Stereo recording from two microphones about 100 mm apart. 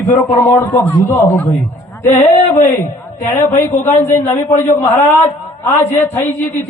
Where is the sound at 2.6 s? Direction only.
20° left (ahead or behind).